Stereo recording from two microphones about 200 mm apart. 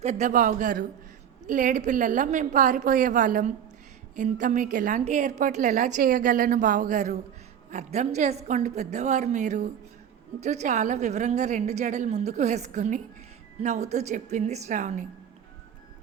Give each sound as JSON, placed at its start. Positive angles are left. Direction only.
{"t": 0.0, "sound": "a woman's voice", "side_deg": -35}